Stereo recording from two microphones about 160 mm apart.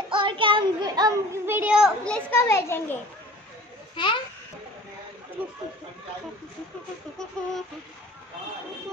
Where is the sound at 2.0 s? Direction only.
10° left (ahead or behind).